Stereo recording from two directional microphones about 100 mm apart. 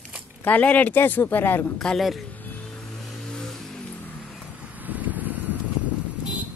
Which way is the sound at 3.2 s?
5° left (ahead or behind).